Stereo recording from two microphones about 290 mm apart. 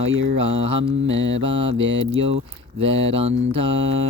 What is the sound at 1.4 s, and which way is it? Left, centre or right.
Speech, centre.